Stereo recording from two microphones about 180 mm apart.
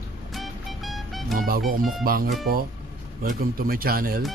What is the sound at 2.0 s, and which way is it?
Speech, 55° right (ahead or behind).